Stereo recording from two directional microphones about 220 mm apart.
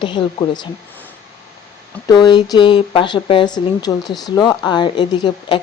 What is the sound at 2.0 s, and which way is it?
Speech, 15° left (ahead or behind).